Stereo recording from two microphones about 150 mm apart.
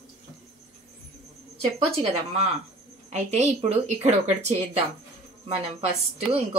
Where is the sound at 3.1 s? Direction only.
45° right (ahead or behind).